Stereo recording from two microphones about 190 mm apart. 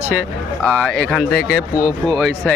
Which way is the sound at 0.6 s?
5° left (ahead or behind).